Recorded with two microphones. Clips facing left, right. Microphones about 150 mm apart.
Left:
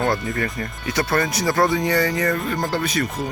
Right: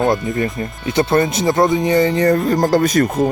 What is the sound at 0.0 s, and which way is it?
Speech, 20° right (ahead or behind).